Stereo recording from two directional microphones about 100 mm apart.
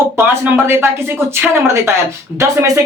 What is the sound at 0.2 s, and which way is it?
Speech, 25° right (ahead or behind).